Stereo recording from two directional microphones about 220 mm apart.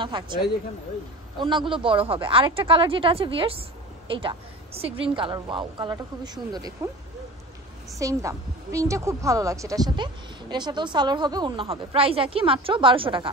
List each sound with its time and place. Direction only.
0.0 s a woman's voice: 20° right (ahead or behind)
1.4 s a woman's voice: 20° right (ahead or behind)
8.0 s a woman's voice: 15° right (ahead or behind)